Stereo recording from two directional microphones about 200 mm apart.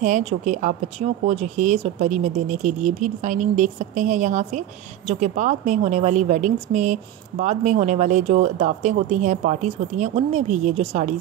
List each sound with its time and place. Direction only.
0.0 s speech: 35° right (ahead or behind)